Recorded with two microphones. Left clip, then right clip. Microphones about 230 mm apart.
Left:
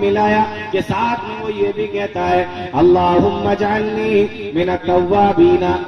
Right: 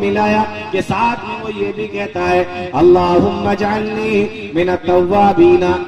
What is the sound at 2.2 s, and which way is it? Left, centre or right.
Speech, right.